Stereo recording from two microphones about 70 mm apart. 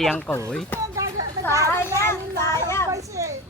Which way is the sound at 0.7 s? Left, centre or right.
Left.